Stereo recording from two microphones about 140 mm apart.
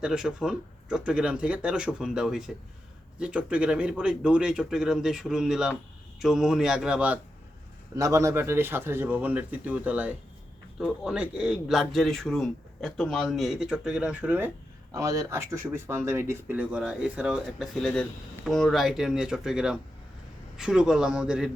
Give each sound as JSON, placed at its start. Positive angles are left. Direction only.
{"t": 0.0, "sound": "speech", "side_deg": -5}
{"t": 7.9, "sound": "speech", "side_deg": -20}